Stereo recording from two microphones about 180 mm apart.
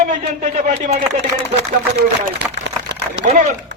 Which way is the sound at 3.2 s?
40° right (ahead or behind).